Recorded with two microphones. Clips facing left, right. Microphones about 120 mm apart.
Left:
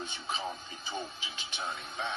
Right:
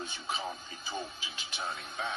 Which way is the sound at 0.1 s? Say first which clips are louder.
Even; 5° right (ahead or behind).